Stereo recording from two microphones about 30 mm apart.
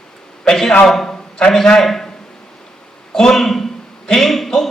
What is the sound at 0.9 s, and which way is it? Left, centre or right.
Speech, centre.